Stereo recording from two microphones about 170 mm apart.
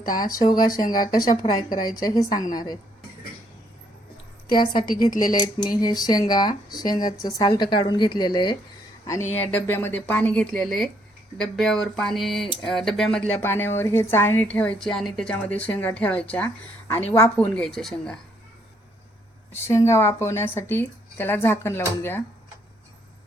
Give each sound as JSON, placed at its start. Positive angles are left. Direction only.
{"t": 0.0, "sound": "a woman's voice", "side_deg": 55}
{"t": 1.0, "sound": "speech", "side_deg": 25}
{"t": 1.4, "sound": "a woman's voice", "side_deg": 50}
{"t": 2.0, "sound": "speech", "side_deg": 20}
{"t": 2.3, "sound": "a woman's voice", "side_deg": 50}
{"t": 4.5, "sound": "speech", "side_deg": 25}
{"t": 5.8, "sound": "speech", "side_deg": 25}
{"t": 9.0, "sound": "a woman's voice", "side_deg": 15}
{"t": 19.5, "sound": "a woman's voice", "side_deg": 15}